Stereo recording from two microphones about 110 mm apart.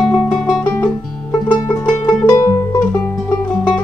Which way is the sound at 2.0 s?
30° left (ahead or behind).